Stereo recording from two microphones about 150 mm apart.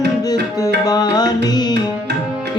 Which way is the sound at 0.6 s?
25° left (ahead or behind).